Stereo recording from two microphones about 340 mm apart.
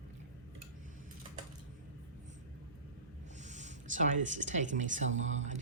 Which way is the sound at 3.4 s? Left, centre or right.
Right.